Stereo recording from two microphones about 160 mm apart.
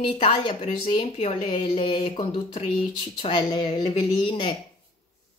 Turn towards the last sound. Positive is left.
turn(degrees=30)  # may be behind; listen again after turning